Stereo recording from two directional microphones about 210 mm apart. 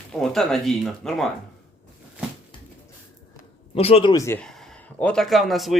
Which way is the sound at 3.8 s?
30° left (ahead or behind).